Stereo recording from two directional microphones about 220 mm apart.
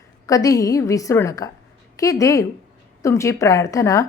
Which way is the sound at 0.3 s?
15° left (ahead or behind).